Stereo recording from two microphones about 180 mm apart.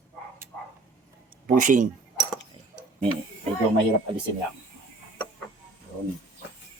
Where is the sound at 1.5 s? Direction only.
45° right (ahead or behind).